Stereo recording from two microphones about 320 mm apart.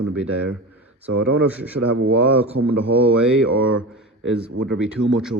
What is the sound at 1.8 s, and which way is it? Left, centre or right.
Speech, right.